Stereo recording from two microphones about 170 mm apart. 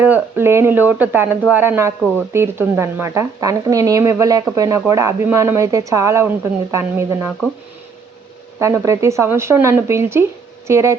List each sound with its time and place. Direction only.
0.0 s speech: 10° right (ahead or behind)
8.5 s speech: 15° right (ahead or behind)